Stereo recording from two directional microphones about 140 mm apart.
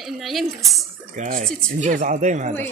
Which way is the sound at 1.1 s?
75° right (ahead or behind).